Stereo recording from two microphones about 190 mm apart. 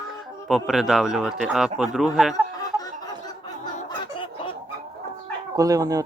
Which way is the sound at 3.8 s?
25° left (ahead or behind).